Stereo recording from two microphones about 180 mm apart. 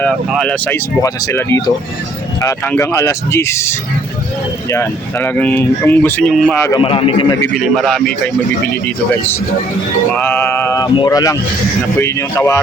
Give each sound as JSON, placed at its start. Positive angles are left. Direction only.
{"t": 0.3, "sound": "speech", "side_deg": 5}
{"t": 6.7, "sound": "speech", "side_deg": 30}
{"t": 7.5, "sound": "speech", "side_deg": 0}
{"t": 10.2, "sound": "music", "side_deg": 10}
{"t": 10.9, "sound": "speech", "side_deg": 20}